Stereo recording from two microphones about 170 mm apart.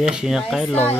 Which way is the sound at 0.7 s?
10° left (ahead or behind).